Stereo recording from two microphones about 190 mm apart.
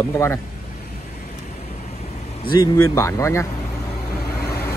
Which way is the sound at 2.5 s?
20° left (ahead or behind).